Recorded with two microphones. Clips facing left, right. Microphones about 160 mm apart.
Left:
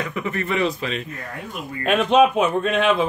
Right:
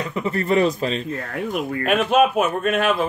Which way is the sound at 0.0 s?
30° right (ahead or behind).